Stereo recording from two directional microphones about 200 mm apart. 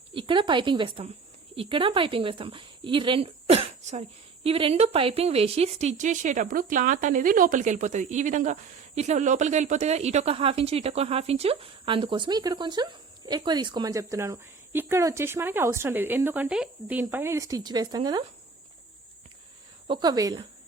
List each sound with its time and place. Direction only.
0.1 s a woman's voice: 25° right (ahead or behind)
19.9 s speech: 20° right (ahead or behind)